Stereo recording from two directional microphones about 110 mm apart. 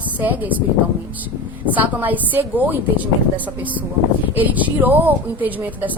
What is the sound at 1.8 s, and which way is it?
Speech, 15° right (ahead or behind).